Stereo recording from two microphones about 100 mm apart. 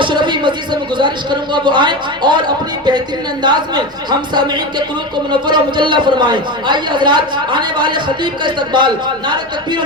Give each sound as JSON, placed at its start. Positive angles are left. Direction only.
{"t": 0.0, "sound": "a sound", "side_deg": -50}
{"t": 3.4, "sound": "a man's voice", "side_deg": -45}
{"t": 5.3, "sound": "a man's voice", "side_deg": -50}